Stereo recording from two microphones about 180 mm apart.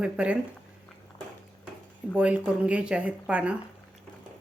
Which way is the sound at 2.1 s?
5° right (ahead or behind).